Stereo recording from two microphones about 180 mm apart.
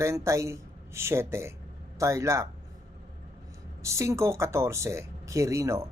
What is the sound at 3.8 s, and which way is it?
Speech, 15° right (ahead or behind).